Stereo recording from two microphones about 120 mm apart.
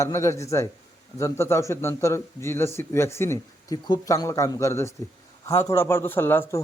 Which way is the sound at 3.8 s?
30° left (ahead or behind).